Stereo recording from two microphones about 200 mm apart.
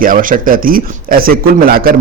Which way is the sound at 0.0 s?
45° right (ahead or behind).